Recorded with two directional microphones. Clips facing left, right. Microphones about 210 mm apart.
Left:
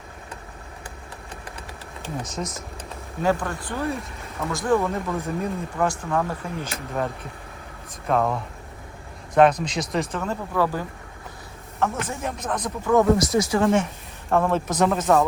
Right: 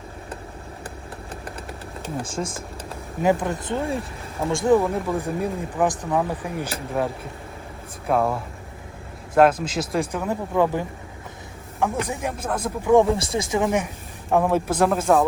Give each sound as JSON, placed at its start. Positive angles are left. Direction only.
{"t": 2.2, "sound": "speech", "side_deg": -30}
{"t": 3.2, "sound": "speech", "side_deg": -20}
{"t": 13.3, "sound": "speech", "side_deg": -15}